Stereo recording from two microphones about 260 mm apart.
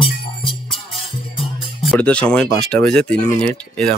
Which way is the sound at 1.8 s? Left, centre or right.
Centre.